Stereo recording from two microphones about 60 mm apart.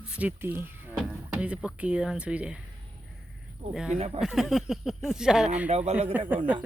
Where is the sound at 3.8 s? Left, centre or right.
Centre.